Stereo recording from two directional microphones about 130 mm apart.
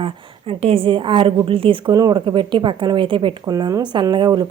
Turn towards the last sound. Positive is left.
turn(degrees=-35)  # may be behind; listen again after turning